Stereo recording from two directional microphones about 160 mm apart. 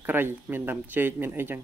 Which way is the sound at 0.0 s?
10° right (ahead or behind).